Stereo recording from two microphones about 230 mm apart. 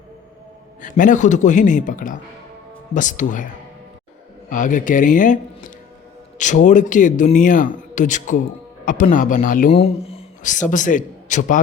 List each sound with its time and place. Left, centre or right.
0.8 s a man's voice: left